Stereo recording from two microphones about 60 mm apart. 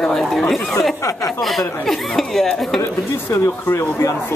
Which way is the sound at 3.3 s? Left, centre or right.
Left.